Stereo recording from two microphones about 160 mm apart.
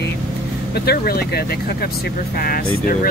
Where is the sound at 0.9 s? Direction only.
75° left (ahead or behind).